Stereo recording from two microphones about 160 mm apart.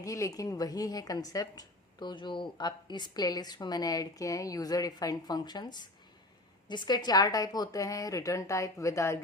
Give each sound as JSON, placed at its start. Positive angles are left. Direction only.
{"t": 0.0, "sound": "a woman's voice", "side_deg": 20}